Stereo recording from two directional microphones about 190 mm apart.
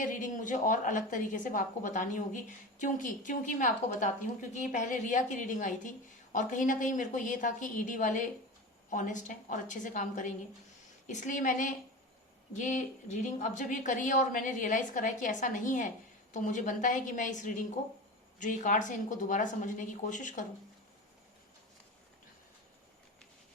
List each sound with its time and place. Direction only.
0.0 s a woman's voice: 45° left (ahead or behind)